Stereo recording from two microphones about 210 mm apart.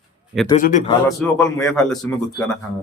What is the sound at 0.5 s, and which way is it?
Speech, 35° left (ahead or behind).